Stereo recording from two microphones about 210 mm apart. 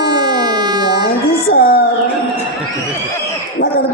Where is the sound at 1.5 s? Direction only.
45° left (ahead or behind).